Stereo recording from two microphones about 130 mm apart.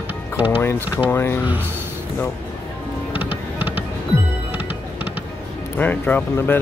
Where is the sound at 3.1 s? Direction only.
10° right (ahead or behind).